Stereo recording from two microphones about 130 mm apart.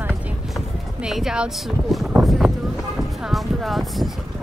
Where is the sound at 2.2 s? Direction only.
Centre (ahead or behind).